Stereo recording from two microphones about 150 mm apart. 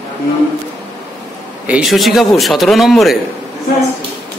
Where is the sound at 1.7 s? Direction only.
5° right (ahead or behind).